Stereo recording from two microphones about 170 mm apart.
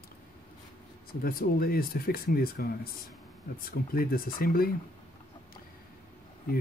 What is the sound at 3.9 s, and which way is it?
Speech, 60° left (ahead or behind).